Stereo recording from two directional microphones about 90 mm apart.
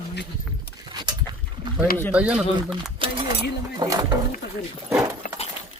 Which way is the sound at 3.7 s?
40° right (ahead or behind).